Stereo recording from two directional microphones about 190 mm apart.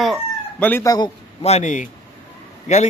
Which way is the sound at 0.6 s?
10° left (ahead or behind).